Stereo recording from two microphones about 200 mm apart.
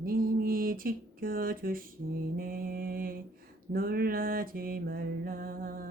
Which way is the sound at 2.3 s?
45° right (ahead or behind).